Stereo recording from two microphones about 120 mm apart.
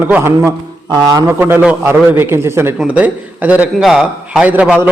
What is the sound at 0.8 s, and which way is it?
Speech, 35° right (ahead or behind).